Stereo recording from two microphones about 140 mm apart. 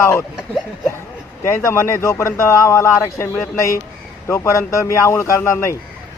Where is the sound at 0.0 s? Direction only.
20° left (ahead or behind).